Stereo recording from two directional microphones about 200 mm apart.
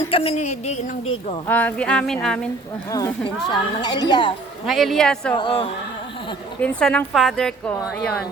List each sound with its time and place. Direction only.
0.1 s speech: 30° left (ahead or behind)
1.5 s a woman's voice: 10° left (ahead or behind)
2.9 s speech: 20° left (ahead or behind)
4.6 s a woman's voice: centre (ahead or behind)
5.3 s speech: 25° left (ahead or behind)
6.6 s a woman's voice: 5° left (ahead or behind)